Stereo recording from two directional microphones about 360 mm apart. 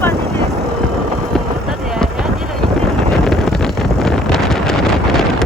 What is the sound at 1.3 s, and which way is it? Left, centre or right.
Vehicle, centre.